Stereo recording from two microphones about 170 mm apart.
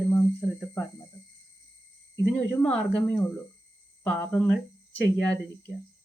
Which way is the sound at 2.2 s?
5° left (ahead or behind).